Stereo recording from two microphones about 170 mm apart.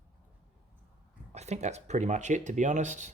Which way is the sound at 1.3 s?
40° right (ahead or behind).